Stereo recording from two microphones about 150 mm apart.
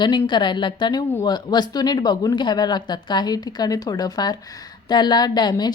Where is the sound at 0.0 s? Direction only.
30° left (ahead or behind).